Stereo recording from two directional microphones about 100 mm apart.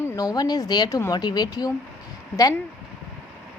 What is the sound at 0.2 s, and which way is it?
Speech, 40° left (ahead or behind).